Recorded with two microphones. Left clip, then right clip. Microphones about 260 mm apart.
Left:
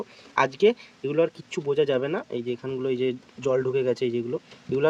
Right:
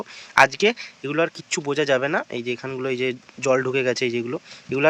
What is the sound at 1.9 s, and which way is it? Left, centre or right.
Speech, right.